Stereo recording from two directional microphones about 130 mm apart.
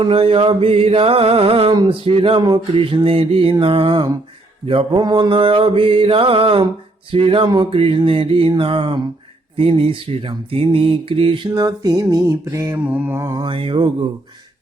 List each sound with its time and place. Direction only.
0.0 s mantra: 45° right (ahead or behind); by 13.4 s 20° right (ahead or behind)
13.4 s mantra: 40° right (ahead or behind)